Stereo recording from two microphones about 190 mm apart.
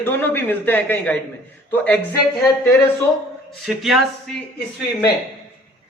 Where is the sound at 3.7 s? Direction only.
Centre (ahead or behind).